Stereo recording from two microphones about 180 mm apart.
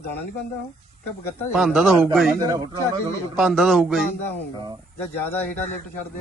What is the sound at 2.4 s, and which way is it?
Speech, 20° right (ahead or behind).